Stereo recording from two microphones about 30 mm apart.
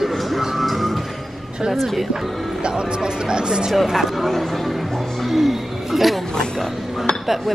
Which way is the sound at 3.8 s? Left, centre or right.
Centre.